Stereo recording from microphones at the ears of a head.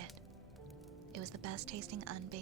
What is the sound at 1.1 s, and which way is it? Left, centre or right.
Speech, right.